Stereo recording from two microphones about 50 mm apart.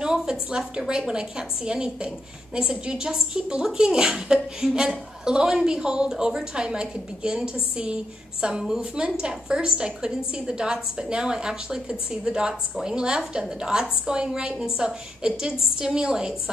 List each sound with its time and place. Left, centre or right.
0.0 s a woman's voice: centre